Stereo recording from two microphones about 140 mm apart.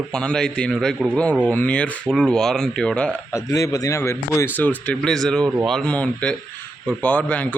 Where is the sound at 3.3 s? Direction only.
20° left (ahead or behind).